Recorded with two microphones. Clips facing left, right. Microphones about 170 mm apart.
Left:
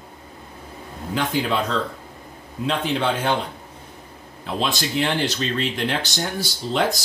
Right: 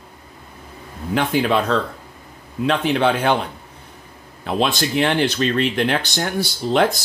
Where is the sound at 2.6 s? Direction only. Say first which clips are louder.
Right 5 dB; 65° right (ahead or behind).